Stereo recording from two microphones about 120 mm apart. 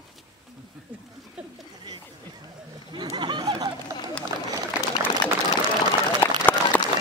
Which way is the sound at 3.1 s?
35° right (ahead or behind).